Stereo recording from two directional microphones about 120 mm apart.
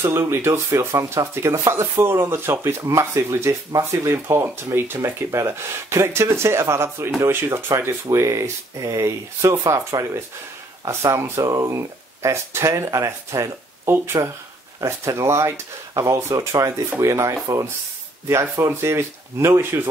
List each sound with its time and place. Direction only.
0.0 s speech: 20° right (ahead or behind)